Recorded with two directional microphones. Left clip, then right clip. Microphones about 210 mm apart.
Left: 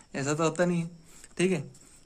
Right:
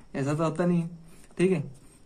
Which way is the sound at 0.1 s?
30° left (ahead or behind).